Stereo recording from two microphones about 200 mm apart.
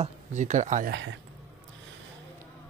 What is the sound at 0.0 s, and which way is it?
Speech, 35° right (ahead or behind).